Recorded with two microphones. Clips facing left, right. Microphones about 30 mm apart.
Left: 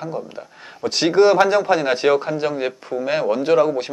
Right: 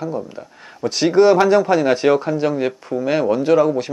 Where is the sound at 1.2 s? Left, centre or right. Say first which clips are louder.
Right 2 dB; centre.